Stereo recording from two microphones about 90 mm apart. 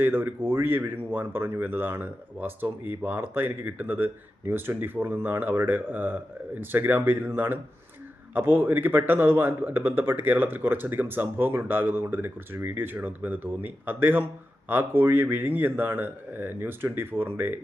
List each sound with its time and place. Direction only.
0.0 s speech: 25° right (ahead or behind)